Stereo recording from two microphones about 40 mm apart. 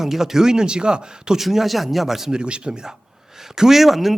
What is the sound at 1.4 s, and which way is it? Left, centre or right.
Speech, centre.